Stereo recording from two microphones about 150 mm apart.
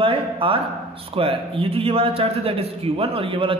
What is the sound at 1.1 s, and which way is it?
A man's voice, 40° right (ahead or behind).